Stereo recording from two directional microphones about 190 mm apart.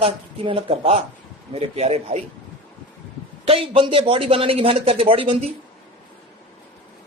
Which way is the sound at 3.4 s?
30° right (ahead or behind).